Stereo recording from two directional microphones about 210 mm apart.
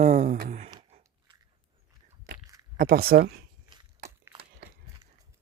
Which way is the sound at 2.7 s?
45° right (ahead or behind).